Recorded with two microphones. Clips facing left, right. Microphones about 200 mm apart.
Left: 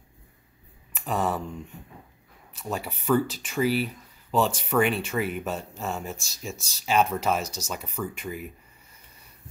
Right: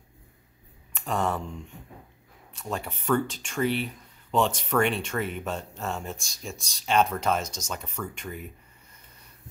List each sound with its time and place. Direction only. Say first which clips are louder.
0.9 s speech: left 1 dB; 5° left (ahead or behind)